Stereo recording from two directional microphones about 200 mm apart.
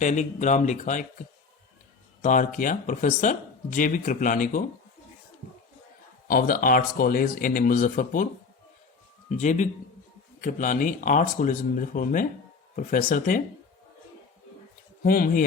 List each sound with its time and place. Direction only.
0.0 s speech: 40° left (ahead or behind)
2.2 s speech: 40° left (ahead or behind)
6.2 s speech: 45° left (ahead or behind)
9.3 s speech: 35° left (ahead or behind)
15.0 s speech: 45° left (ahead or behind)